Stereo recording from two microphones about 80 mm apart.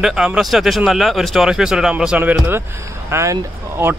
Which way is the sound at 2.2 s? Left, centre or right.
Right.